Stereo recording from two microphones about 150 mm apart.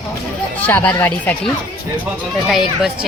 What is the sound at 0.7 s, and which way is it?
Speech, 10° left (ahead or behind).